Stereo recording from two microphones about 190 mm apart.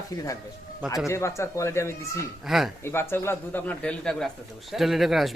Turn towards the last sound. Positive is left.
turn(degrees=0)  # may be behind; listen again after turning